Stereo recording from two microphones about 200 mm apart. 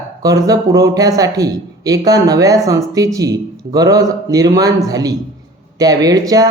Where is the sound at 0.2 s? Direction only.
15° right (ahead or behind).